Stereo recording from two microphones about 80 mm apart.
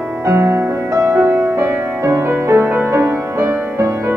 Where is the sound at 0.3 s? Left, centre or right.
Right.